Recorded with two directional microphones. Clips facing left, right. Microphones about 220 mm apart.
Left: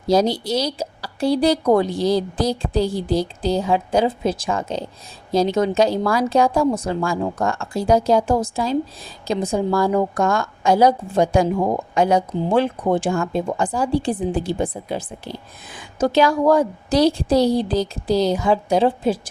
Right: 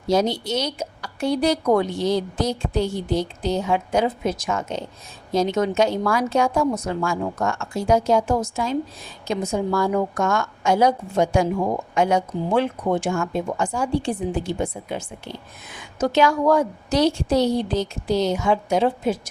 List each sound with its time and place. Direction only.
0.1 s a woman's voice: 35° left (ahead or behind)